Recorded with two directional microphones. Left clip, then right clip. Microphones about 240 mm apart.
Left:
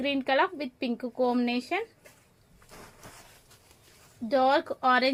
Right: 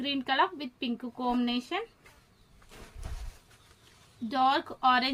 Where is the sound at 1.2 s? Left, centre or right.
Left.